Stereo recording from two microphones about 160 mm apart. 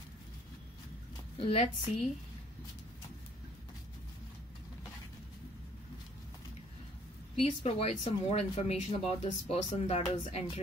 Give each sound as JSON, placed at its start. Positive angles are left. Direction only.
{"t": 1.4, "sound": "speech", "side_deg": 40}
{"t": 7.3, "sound": "speech", "side_deg": 40}